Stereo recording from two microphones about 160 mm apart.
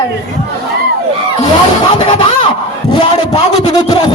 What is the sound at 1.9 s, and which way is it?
Speech, 30° left (ahead or behind).